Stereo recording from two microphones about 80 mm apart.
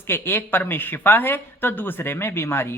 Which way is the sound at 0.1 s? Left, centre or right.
Left.